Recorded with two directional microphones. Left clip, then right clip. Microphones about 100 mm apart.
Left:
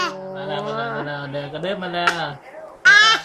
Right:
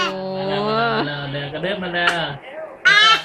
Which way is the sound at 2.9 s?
45° left (ahead or behind).